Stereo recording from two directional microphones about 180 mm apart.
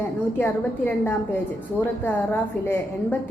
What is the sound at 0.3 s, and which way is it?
A woman's voice, 10° left (ahead or behind).